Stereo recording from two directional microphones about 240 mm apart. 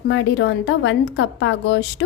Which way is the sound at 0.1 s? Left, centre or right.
Left.